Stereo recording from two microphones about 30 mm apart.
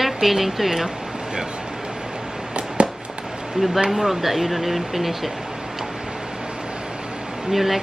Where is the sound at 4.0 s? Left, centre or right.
Centre.